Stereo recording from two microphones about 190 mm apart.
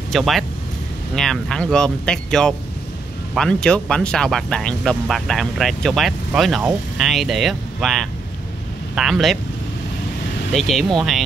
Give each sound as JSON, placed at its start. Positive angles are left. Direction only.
{"t": 0.1, "sound": "speech", "side_deg": 0}
{"t": 10.5, "sound": "speech", "side_deg": 0}